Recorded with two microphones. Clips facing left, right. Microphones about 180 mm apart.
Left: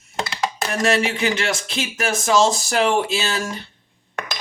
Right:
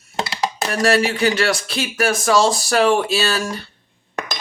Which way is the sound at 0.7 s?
20° left (ahead or behind).